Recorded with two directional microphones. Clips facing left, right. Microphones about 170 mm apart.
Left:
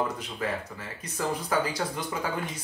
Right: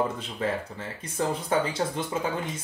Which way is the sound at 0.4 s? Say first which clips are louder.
Right 3 dB; 30° right (ahead or behind).